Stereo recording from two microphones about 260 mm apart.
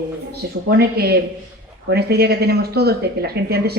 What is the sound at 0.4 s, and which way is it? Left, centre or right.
Speech, right.